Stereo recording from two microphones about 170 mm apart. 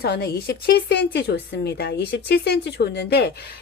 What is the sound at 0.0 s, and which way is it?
Speech, 70° left (ahead or behind).